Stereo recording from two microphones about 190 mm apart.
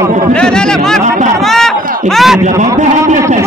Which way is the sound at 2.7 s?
40° right (ahead or behind).